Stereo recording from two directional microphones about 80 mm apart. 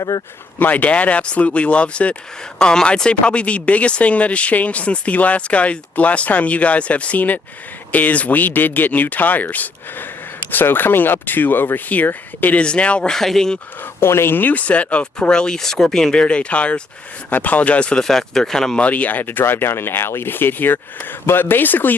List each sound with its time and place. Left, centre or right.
0.1 s speech: left
0.6 s speech: left
14.0 s speech: left; by 18.9 s centre
18.9 s speech: centre